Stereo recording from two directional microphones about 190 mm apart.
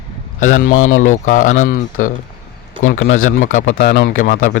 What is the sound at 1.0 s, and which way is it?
A man's voice, 40° left (ahead or behind).